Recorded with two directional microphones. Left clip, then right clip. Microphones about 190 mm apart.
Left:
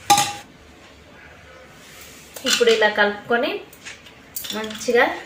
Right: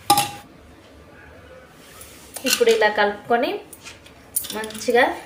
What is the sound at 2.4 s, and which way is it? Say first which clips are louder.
Speech: left 1 dB; 15° right (ahead or behind).